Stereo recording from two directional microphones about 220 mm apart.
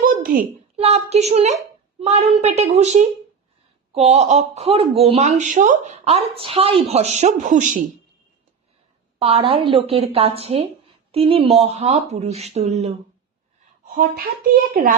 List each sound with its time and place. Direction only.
0.0 s a child's voice: 30° right (ahead or behind)
9.2 s a woman's voice: 25° right (ahead or behind)
13.8 s a sound: 40° right (ahead or behind)
14.5 s speech: 40° right (ahead or behind)